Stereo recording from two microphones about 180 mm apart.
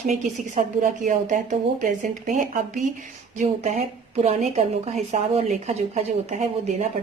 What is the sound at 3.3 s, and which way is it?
A woman's voice, 40° right (ahead or behind).